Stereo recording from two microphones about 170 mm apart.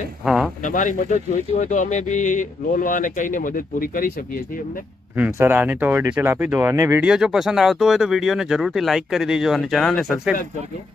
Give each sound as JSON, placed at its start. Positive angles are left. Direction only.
{"t": 0.2, "sound": "a sound", "side_deg": -5}
{"t": 0.7, "sound": "speech", "side_deg": 50}
{"t": 5.1, "sound": "speech", "side_deg": -10}